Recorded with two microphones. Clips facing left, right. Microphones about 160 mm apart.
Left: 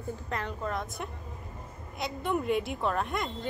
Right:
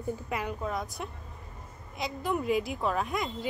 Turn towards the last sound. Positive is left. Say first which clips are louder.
# right 1 dB
turn(degrees=0)  # may be behind; listen again after turning